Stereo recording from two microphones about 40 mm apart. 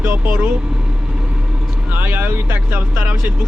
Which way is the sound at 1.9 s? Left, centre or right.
Right.